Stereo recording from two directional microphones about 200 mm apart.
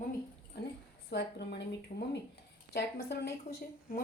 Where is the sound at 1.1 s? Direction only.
55° left (ahead or behind).